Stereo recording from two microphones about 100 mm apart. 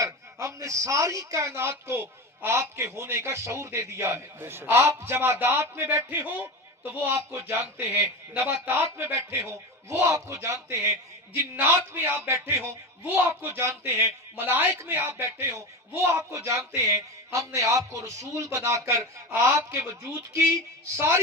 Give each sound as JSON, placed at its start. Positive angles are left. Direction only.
{"t": 0.0, "sound": "a man's voice", "side_deg": -30}
{"t": 6.1, "sound": "a man's voice", "side_deg": -15}